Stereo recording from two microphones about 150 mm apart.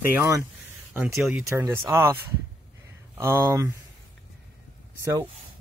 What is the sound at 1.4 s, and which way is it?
Speech, 20° right (ahead or behind).